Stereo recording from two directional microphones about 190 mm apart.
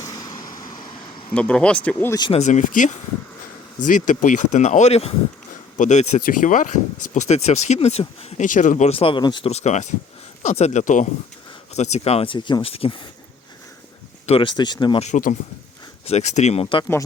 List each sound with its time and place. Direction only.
0.0 s vehicle: 20° left (ahead or behind)
1.3 s speech: 5° left (ahead or behind)
2.1 s speech: 25° left (ahead or behind)
2.4 s speech: 40° left (ahead or behind)
14.3 s speech: 30° left (ahead or behind)
15.0 s speech: 40° left (ahead or behind)